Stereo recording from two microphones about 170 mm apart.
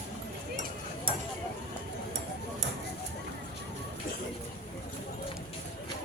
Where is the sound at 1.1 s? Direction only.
30° right (ahead or behind).